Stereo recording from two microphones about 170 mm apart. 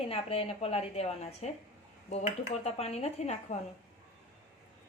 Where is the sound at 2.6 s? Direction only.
40° left (ahead or behind).